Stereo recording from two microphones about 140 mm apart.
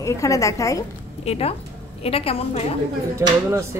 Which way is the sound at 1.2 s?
50° left (ahead or behind).